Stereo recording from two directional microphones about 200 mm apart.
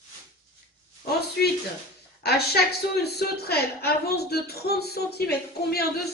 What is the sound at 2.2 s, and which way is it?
A woman's voice, 55° left (ahead or behind).